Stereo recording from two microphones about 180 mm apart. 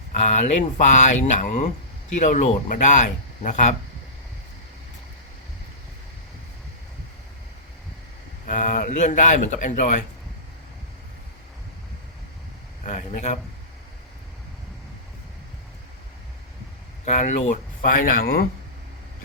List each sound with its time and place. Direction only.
0.2 s speech: 40° left (ahead or behind)
8.5 s speech: 45° left (ahead or behind)
12.8 s speech: 40° left (ahead or behind)
17.2 s speech: 40° left (ahead or behind)
18.0 s speech: 50° left (ahead or behind)